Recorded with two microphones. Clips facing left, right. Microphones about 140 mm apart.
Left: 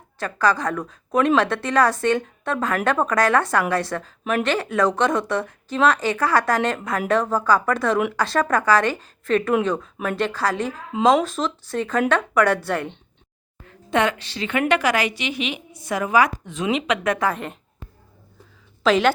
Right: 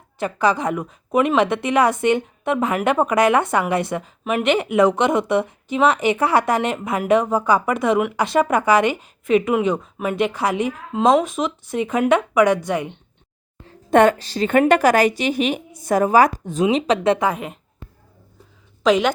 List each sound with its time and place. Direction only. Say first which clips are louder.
0.2 s a woman's voice: right 2 dB; 20° right (ahead or behind)
1.1 s speech: right 1 dB; 5° right (ahead or behind)
1.4 s a woman's voice: right 2 dB; 20° right (ahead or behind)
10.9 s speech: right 1 dB; centre (ahead or behind)
11.3 s speech: right 2 dB; 20° right (ahead or behind)
13.9 s a woman's voice: right 7 dB; 45° right (ahead or behind); by 17.2 s 30° right (ahead or behind)
17.3 s speech: right 1 dB; 5° right (ahead or behind)